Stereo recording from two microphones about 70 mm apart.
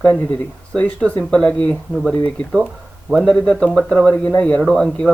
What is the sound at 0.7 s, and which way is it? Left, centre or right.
Speech, centre.